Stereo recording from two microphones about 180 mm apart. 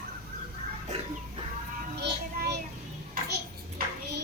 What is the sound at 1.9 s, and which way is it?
Child singing, 65° right (ahead or behind).